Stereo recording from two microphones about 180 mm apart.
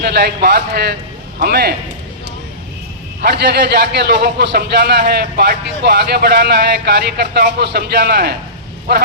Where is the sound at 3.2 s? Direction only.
65° right (ahead or behind).